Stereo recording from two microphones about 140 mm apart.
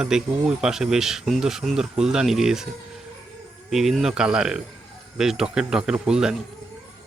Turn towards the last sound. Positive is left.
turn(degrees=-5)  # may be behind; listen again after turning